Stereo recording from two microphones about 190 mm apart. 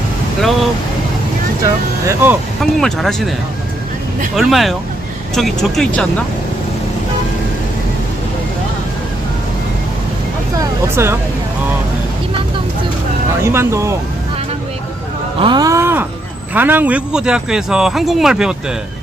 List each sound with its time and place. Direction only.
1.6 s speech: 15° right (ahead or behind)
2.6 s speech: centre (ahead or behind)
4.4 s speech: centre (ahead or behind)
10.6 s a sound: 15° right (ahead or behind)
13.4 s speech: 15° right (ahead or behind)
15.4 s speech: 25° right (ahead or behind); by 18.5 s 5° right (ahead or behind)